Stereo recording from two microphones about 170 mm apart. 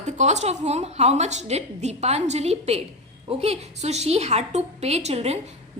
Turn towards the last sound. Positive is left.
turn(degrees=-40)  # may be behind; listen again after turning